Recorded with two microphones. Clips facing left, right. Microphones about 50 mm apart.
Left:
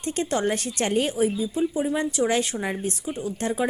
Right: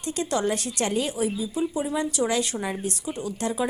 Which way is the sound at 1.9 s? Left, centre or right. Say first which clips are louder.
Left 2 dB; left.